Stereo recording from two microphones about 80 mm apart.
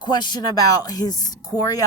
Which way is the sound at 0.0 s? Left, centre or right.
Left.